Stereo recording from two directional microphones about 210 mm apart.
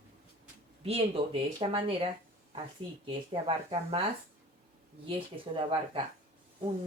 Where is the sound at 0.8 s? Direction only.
25° right (ahead or behind).